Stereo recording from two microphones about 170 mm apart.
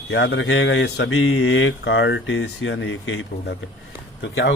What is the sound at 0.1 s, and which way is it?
A man's voice, 75° left (ahead or behind).